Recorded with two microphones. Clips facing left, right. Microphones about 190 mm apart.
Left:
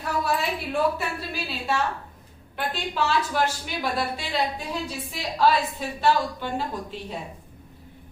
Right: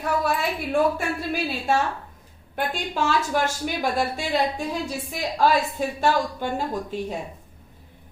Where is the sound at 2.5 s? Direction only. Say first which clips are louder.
Right 2 dB; 45° right (ahead or behind).